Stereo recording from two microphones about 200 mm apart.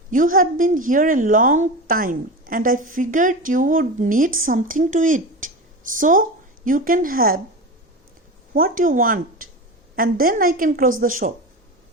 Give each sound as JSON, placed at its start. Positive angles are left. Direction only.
{"t": 0.1, "sound": "a woman's voice", "side_deg": -45}
{"t": 8.5, "sound": "a woman's voice", "side_deg": -45}